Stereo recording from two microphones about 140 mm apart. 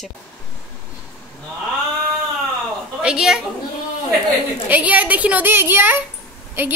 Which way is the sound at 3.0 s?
5° right (ahead or behind).